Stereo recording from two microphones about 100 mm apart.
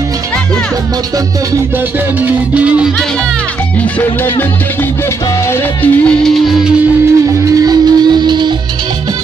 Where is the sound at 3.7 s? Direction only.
20° left (ahead or behind).